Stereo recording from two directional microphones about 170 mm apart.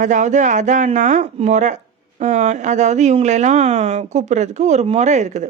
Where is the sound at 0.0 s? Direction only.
45° right (ahead or behind).